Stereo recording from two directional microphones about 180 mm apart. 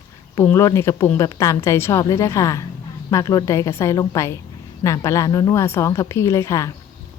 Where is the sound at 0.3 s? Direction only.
15° left (ahead or behind).